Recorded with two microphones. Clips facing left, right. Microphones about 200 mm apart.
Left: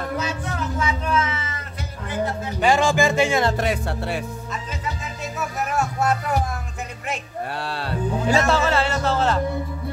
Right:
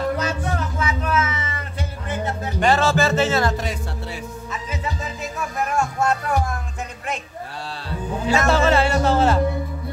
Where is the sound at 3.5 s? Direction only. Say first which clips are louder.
Left 4 dB; 60° left (ahead or behind).